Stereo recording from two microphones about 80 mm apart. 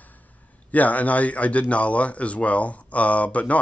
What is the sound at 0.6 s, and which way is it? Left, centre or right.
Speech, centre.